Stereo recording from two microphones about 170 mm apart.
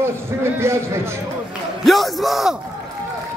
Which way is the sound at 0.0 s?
15° right (ahead or behind).